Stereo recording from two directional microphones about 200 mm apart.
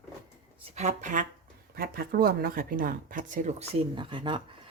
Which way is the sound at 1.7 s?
50° right (ahead or behind).